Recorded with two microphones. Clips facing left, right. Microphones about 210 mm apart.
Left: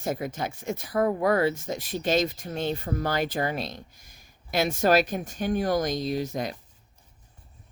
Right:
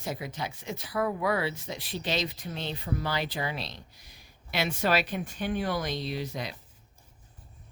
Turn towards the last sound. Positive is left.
turn(degrees=45)  # may be behind; listen again after turning